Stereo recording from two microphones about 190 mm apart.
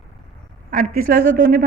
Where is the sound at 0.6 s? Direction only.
50° right (ahead or behind).